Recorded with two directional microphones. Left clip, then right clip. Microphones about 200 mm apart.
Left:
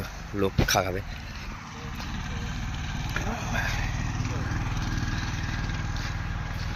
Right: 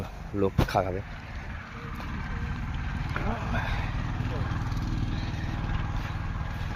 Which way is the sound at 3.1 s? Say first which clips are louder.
Left 2 dB; 5° right (ahead or behind).